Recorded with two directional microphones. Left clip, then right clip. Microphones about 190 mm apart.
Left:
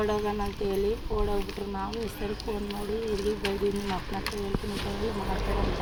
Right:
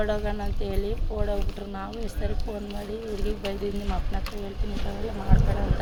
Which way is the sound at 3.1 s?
70° right (ahead or behind).